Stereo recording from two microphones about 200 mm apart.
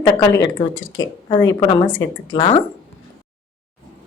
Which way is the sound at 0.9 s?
20° left (ahead or behind).